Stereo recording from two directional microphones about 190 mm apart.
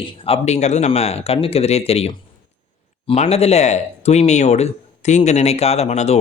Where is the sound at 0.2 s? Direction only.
35° left (ahead or behind).